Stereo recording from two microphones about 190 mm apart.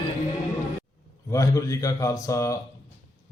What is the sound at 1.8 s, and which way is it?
Speech, 15° left (ahead or behind).